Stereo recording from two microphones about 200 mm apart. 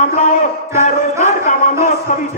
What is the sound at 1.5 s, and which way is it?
Speech, 40° left (ahead or behind).